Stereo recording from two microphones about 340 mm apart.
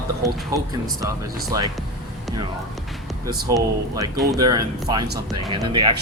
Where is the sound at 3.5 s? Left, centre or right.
Centre.